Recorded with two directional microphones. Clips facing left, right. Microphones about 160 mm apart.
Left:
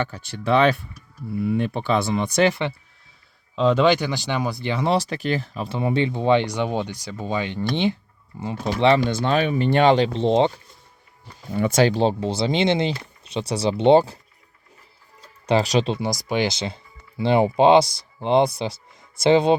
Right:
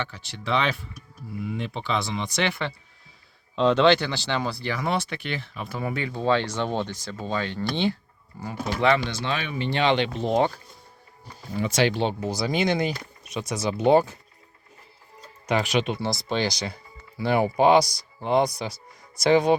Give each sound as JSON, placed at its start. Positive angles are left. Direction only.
{"t": 0.0, "sound": "speech", "side_deg": 50}
{"t": 3.5, "sound": "speech", "side_deg": 5}
{"t": 5.6, "sound": "speech", "side_deg": 25}
{"t": 9.0, "sound": "speech", "side_deg": 45}
{"t": 11.5, "sound": "speech", "side_deg": 50}
{"t": 15.4, "sound": "speech", "side_deg": 35}
{"t": 16.3, "sound": "speech", "side_deg": 20}